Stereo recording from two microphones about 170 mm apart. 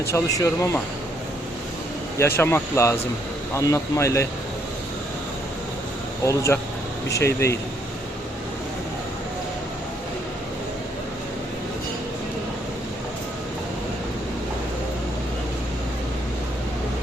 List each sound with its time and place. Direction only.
0.1 s speech: 15° left (ahead or behind)
2.1 s speech: 15° left (ahead or behind)
6.2 s speech: 15° left (ahead or behind)